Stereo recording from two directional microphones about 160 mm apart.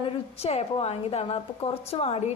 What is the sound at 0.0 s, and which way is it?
A woman's voice, 40° left (ahead or behind).